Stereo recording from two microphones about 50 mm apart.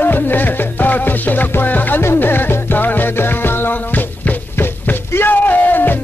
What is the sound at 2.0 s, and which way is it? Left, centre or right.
Music, left.